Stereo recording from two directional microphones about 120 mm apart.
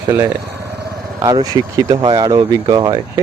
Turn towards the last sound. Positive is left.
turn(degrees=-35)  # may be behind; listen again after turning